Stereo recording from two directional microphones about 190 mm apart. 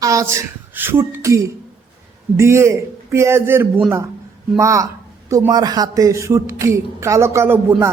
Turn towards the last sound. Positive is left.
turn(degrees=-10)  # may be behind; listen again after turning